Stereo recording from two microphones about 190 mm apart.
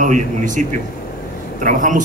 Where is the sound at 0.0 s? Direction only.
40° right (ahead or behind).